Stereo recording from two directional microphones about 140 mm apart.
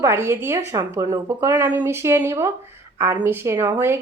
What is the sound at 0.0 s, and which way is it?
A woman's voice, 20° right (ahead or behind).